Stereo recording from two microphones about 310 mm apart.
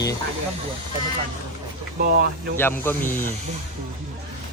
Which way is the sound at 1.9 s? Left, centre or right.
Right.